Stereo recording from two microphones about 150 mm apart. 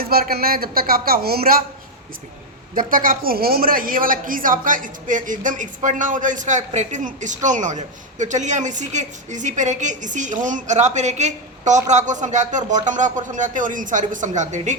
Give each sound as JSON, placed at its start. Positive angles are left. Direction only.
{"t": 0.0, "sound": "speech", "side_deg": -85}
{"t": 2.7, "sound": "a woman's voice", "side_deg": -70}